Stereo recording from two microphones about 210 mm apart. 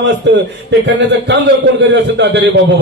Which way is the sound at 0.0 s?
55° right (ahead or behind).